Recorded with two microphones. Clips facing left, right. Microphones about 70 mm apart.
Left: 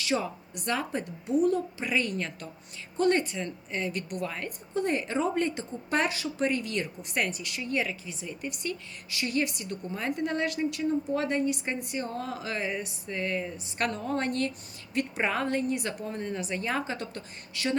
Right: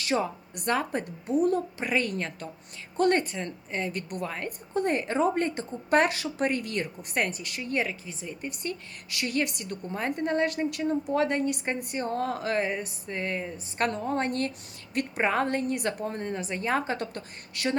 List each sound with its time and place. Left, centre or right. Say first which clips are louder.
0.0 s a woman's voice: right 2 dB; right
3.0 s a woman's voice: right 1 dB; right
3.4 s a woman's voice: right 1 dB; right
9.0 s a woman's voice: even; right
9.9 s a woman's voice: right 3 dB; right
14.3 s a woman's voice: even; right